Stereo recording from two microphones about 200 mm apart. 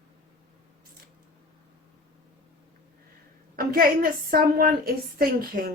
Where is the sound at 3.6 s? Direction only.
50° right (ahead or behind).